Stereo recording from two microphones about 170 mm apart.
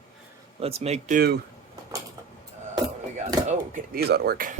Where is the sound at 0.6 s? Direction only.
35° right (ahead or behind).